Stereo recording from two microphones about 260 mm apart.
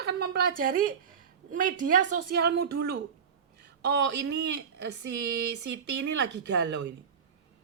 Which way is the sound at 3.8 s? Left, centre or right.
Right.